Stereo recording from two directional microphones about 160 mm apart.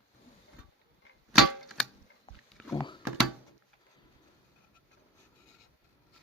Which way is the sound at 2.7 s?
30° left (ahead or behind).